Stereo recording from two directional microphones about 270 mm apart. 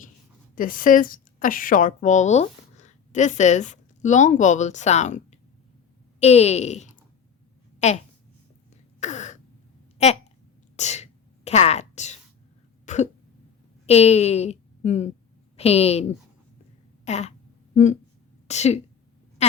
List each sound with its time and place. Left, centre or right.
0.5 s a woman's voice: left
9.0 s throat clearing: left
10.0 s speech: left
10.8 s whispering: left
12.8 s cough: left
13.8 s a woman's voice: left
17.1 s speech: left
18.4 s speech: left
19.4 s a sound: left